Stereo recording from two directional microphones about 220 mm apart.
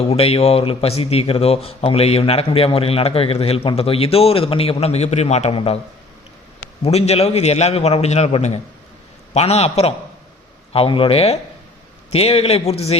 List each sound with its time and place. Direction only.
0.0 s speech: 25° left (ahead or behind)
6.8 s speech: 30° left (ahead or behind)